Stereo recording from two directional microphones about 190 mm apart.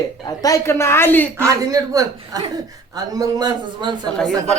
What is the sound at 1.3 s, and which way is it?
A woman's voice, 15° right (ahead or behind).